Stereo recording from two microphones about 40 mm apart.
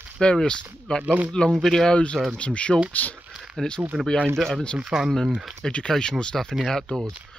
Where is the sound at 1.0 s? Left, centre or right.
Right.